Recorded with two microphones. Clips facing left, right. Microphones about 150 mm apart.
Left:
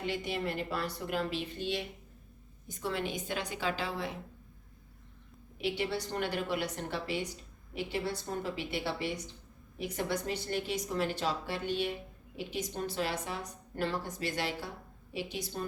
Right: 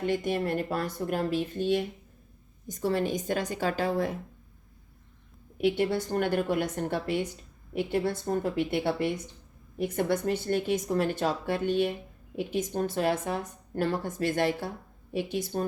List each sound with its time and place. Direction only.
0.0 s a woman's voice: 45° right (ahead or behind)
5.5 s a woman's voice: 50° right (ahead or behind)